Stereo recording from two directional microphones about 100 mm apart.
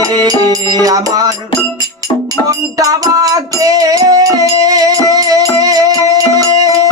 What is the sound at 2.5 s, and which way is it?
Music, 35° right (ahead or behind).